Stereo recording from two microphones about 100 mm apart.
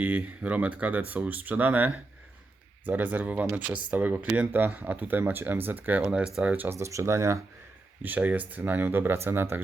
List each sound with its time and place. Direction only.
0.0 s speech: 15° right (ahead or behind)
6.0 s speech: 5° right (ahead or behind)
6.6 s speech: 25° right (ahead or behind)
8.0 s speech: 15° right (ahead or behind)